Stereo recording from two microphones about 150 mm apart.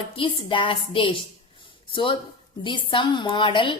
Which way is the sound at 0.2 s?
35° left (ahead or behind).